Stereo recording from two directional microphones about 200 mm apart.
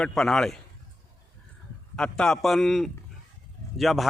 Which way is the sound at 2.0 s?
5° left (ahead or behind).